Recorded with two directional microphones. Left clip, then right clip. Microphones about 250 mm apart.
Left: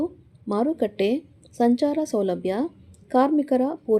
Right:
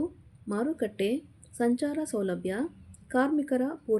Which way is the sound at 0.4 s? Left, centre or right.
Centre.